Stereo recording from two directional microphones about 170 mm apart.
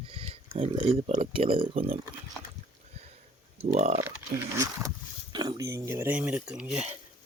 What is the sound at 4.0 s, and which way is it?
Speech, 15° right (ahead or behind).